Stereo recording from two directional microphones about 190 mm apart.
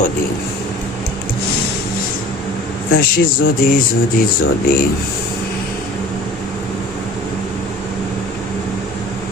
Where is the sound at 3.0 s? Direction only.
50° left (ahead or behind).